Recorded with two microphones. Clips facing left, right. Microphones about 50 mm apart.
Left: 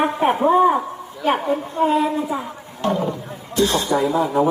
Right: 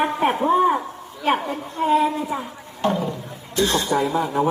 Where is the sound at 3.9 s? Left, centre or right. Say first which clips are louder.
Left 2 dB; centre.